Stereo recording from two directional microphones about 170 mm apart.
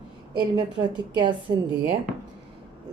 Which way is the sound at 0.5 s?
25° right (ahead or behind).